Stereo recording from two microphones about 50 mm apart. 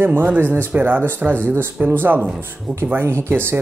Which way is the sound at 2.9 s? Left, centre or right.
Right.